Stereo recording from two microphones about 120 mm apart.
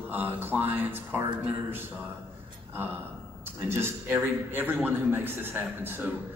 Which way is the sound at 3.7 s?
20° right (ahead or behind).